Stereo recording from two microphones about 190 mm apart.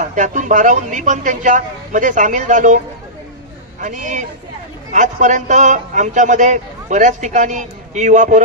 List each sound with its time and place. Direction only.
0.0 s a man's voice: 40° right (ahead or behind)
3.8 s a man's voice: 40° right (ahead or behind)